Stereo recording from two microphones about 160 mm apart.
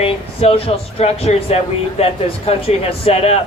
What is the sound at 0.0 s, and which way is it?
Speech, 35° left (ahead or behind).